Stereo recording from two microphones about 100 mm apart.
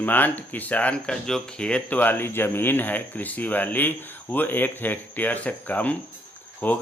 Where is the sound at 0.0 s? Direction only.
20° left (ahead or behind).